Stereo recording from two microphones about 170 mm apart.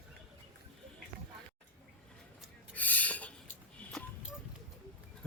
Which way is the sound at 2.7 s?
10° left (ahead or behind).